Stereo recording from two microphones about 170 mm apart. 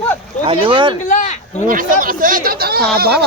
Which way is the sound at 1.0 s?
45° left (ahead or behind).